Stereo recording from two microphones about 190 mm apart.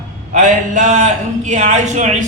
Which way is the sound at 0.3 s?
40° right (ahead or behind).